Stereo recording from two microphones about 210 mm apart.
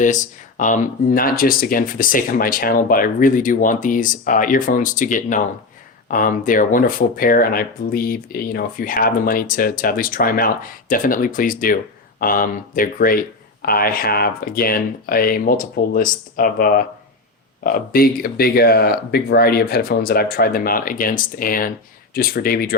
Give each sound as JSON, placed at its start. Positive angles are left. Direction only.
{"t": 0.0, "sound": "speech", "side_deg": 35}